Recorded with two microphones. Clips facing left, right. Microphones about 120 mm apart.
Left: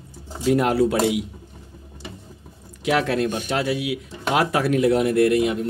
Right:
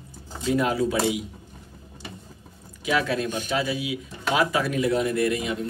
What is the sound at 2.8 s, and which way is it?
Speech, 70° left (ahead or behind).